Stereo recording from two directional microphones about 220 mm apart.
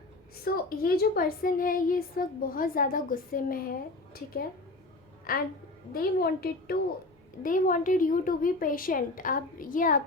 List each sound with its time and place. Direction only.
0.4 s a woman's voice: 45° left (ahead or behind)